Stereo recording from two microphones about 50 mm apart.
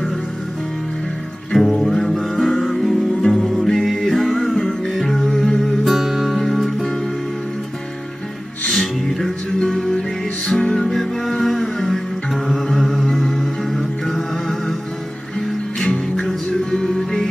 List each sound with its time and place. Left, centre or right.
1.5 s music: centre
6.2 s music: centre
9.7 s music: centre
15.8 s music: centre